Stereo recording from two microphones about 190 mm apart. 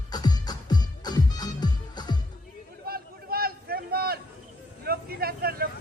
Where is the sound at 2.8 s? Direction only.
55° right (ahead or behind).